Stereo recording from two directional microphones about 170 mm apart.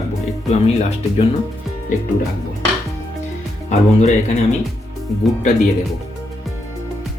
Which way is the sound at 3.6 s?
45° left (ahead or behind).